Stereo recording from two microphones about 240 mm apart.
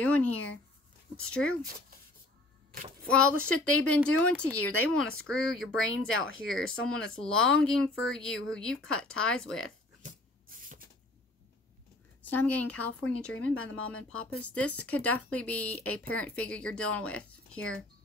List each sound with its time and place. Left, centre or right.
0.0 s speech: centre
3.1 s speech: centre
10.0 s a sound: right
12.2 s speech: centre